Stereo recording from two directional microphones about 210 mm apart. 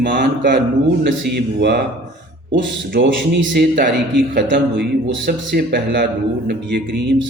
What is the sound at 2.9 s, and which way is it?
A man's voice, 55° right (ahead or behind).